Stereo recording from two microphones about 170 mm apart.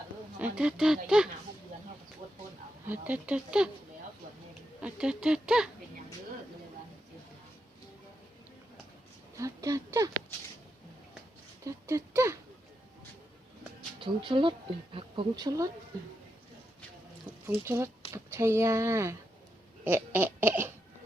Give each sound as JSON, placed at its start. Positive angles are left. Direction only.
{"t": 0.3, "sound": "speech", "side_deg": -5}
{"t": 2.8, "sound": "speech", "side_deg": -10}
{"t": 4.8, "sound": "speech", "side_deg": -5}
{"t": 9.4, "sound": "speech", "side_deg": -20}
{"t": 11.6, "sound": "a sound", "side_deg": -15}
{"t": 14.0, "sound": "speech", "side_deg": -30}
{"t": 17.4, "sound": "speech", "side_deg": -15}
{"t": 19.8, "sound": "laughter", "side_deg": -10}